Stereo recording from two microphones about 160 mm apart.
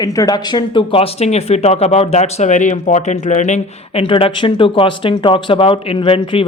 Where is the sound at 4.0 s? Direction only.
35° left (ahead or behind).